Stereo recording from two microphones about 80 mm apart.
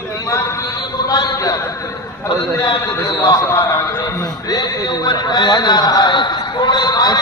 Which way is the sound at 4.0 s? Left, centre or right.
Left.